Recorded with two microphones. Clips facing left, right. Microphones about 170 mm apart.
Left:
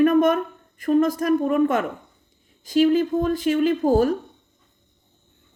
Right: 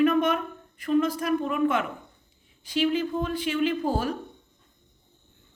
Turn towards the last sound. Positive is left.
turn(degrees=40)  # may be behind; listen again after turning